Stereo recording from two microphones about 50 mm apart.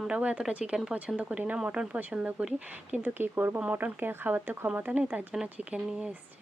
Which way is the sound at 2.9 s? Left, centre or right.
Right.